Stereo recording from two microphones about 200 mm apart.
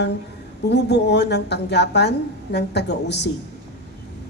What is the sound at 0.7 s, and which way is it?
A woman's voice, 60° left (ahead or behind).